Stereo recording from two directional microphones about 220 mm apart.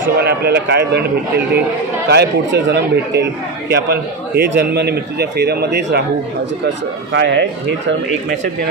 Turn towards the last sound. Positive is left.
turn(degrees=-55)  # may be behind; listen again after turning